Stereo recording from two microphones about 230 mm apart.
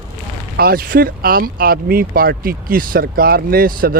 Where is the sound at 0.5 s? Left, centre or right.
Right.